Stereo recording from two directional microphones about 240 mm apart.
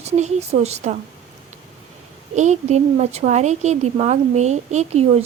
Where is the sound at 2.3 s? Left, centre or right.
Right.